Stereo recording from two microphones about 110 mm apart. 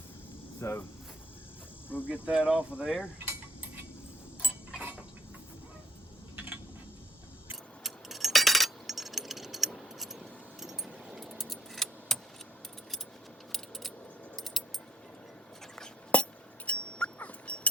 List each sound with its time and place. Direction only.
0.6 s speech: 20° left (ahead or behind)
2.0 s speech: 10° right (ahead or behind)
3.2 s a sound: 15° right (ahead or behind)
6.3 s a sound: 15° right (ahead or behind)
7.9 s glass: centre (ahead or behind)
13.5 s coin: centre (ahead or behind)
14.3 s keys jangling: centre (ahead or behind)
16.1 s music: 10° left (ahead or behind)
16.6 s dog: 10° left (ahead or behind)